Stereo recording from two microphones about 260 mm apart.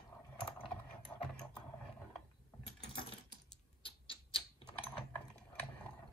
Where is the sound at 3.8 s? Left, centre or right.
Centre.